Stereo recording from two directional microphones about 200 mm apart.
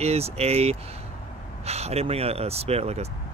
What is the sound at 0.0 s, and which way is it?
Speech, 30° right (ahead or behind).